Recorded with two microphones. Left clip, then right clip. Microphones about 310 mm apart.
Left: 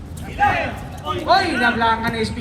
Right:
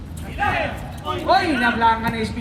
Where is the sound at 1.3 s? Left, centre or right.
Centre.